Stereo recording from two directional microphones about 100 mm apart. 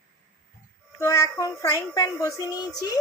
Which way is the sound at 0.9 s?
30° left (ahead or behind).